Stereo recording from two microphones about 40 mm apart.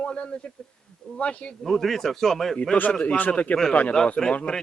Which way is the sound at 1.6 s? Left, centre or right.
Centre.